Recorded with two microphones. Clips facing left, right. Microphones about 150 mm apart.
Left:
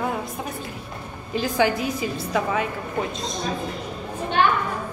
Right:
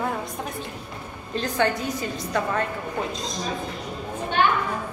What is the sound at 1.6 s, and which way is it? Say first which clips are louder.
A woman's voice: left 2 dB; 10° left (ahead or behind).